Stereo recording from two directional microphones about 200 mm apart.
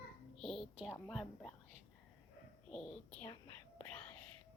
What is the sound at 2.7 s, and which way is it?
Speech, 5° left (ahead or behind).